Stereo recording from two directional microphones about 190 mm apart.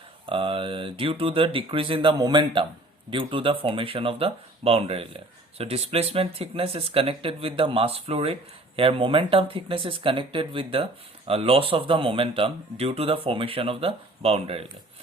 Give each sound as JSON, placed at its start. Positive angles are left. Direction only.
{"t": 0.3, "sound": "speech", "side_deg": -25}